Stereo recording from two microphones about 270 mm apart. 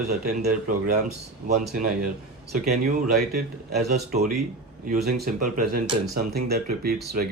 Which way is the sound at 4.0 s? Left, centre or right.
Right.